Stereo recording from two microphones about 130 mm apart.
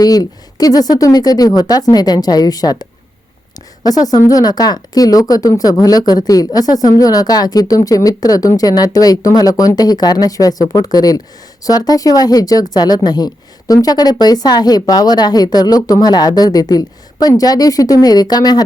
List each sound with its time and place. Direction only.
0.0 s speech: 30° left (ahead or behind)
3.8 s a woman's voice: 30° left (ahead or behind)